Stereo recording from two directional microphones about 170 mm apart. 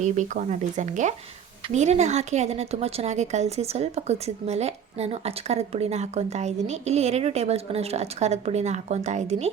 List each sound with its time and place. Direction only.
0.0 s a woman's voice: 45° right (ahead or behind)